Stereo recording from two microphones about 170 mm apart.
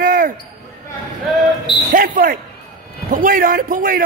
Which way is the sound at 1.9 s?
55° right (ahead or behind).